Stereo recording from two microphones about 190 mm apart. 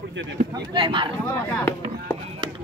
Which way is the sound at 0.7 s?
25° right (ahead or behind).